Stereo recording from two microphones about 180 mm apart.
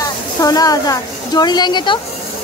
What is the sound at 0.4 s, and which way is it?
Speech, 20° left (ahead or behind).